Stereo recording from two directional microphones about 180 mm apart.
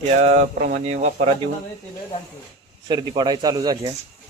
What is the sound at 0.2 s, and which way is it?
Speech, 40° right (ahead or behind).